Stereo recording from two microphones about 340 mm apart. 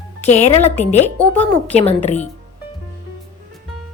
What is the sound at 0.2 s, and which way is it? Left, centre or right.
Speech, centre.